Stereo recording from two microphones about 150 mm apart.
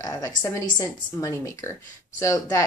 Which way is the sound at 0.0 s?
25° left (ahead or behind).